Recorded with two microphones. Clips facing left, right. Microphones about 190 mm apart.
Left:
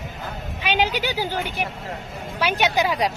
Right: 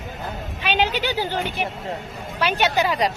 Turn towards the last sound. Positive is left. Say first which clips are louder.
# right 1 dB
turn(degrees=10)  # may be behind; listen again after turning